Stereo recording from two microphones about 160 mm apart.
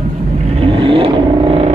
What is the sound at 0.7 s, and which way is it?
Vehicle, 35° right (ahead or behind).